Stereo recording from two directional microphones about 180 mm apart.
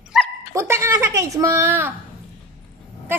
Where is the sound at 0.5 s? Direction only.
15° right (ahead or behind).